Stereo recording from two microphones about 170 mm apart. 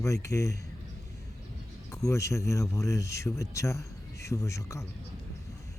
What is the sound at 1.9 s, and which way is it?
Speech, 15° left (ahead or behind).